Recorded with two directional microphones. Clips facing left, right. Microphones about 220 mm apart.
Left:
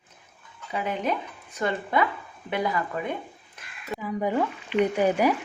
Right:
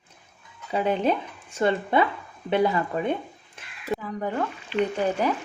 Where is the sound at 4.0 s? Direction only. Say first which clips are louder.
Left 6 dB; 10° left (ahead or behind).